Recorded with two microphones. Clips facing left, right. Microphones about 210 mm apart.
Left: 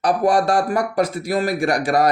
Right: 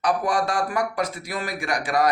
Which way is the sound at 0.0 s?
35° left (ahead or behind).